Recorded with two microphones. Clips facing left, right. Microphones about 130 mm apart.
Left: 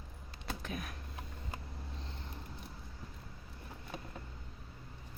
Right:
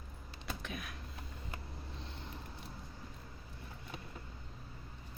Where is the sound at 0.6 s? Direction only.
40° left (ahead or behind).